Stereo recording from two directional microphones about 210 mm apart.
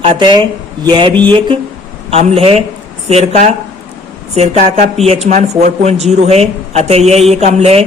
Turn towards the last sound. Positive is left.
turn(degrees=-30)  # may be behind; listen again after turning